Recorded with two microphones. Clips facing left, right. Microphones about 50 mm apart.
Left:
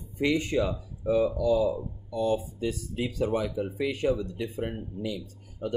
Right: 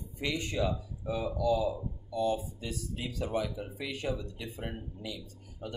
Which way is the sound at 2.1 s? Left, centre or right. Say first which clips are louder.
Left 4 dB; left.